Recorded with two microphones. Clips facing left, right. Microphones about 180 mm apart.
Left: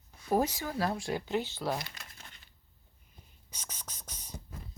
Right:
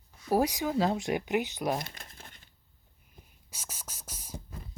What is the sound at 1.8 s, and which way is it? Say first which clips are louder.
Crumpling: right 3 dB; 45° right (ahead or behind).